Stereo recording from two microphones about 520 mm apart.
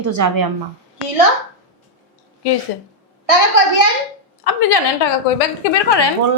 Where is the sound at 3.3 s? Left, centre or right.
Right.